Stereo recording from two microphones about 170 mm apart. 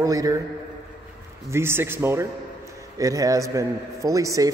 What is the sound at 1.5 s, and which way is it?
A man's voice, 15° right (ahead or behind).